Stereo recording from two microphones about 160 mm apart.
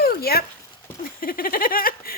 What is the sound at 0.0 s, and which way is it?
Dog, 75° left (ahead or behind).